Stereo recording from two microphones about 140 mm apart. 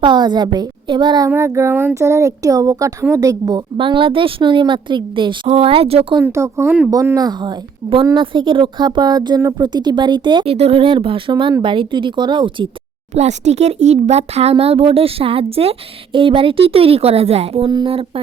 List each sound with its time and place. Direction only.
0.0 s speech: 30° right (ahead or behind)
1.3 s speech: 20° right (ahead or behind); by 6.1 s 45° right (ahead or behind)
6.2 s a woman's voice: 20° right (ahead or behind)
13.1 s speech: 55° right (ahead or behind)
17.7 s speech: 30° right (ahead or behind)